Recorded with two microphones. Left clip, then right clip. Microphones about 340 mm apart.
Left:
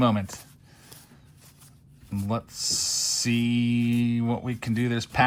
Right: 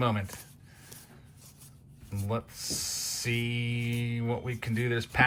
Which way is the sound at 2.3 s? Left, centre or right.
Centre.